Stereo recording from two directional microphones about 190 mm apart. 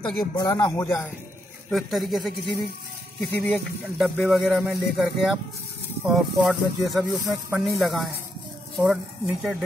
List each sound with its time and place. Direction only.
0.0 s speech: centre (ahead or behind)
0.4 s a man's voice: 20° left (ahead or behind)
1.7 s speech: centre (ahead or behind)
3.3 s speech: centre (ahead or behind)